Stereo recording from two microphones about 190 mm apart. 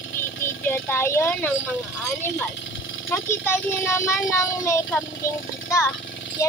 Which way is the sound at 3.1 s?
10° left (ahead or behind).